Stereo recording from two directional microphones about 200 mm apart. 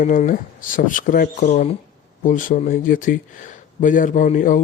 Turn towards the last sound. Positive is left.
turn(degrees=40)  # may be behind; listen again after turning